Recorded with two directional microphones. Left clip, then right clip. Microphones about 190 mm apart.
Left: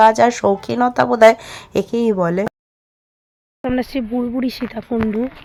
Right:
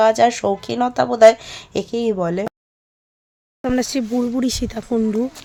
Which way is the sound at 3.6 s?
15° right (ahead or behind).